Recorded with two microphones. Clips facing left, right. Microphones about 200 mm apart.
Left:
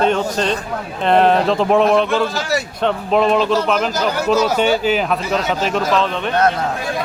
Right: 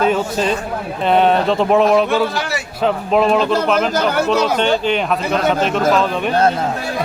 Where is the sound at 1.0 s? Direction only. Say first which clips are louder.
Even; centre (ahead or behind).